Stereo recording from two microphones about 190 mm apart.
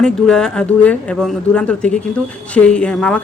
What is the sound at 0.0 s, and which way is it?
Speech, 5° left (ahead or behind).